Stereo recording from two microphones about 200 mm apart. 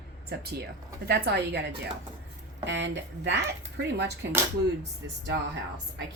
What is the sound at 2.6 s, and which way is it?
Speech, 60° right (ahead or behind).